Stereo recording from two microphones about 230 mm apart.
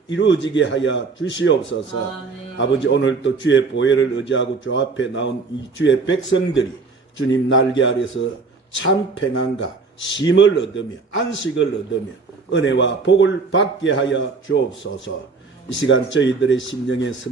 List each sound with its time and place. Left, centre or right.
0.1 s a man's voice: left